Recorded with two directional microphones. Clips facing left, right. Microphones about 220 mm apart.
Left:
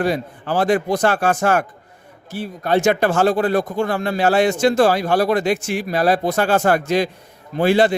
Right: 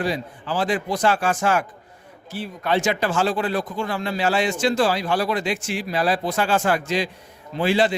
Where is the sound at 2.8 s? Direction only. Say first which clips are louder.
Left 8 dB; 55° left (ahead or behind).